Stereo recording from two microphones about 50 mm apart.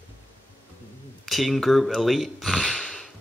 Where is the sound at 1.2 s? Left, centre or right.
Centre.